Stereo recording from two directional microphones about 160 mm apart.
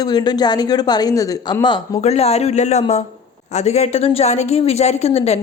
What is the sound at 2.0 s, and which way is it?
A woman's voice, 40° left (ahead or behind).